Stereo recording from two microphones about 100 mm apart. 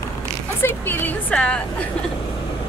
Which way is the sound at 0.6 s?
20° left (ahead or behind).